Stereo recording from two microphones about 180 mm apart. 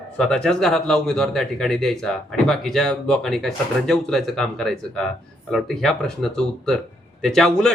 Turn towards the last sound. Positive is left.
turn(degrees=5)  # may be behind; listen again after turning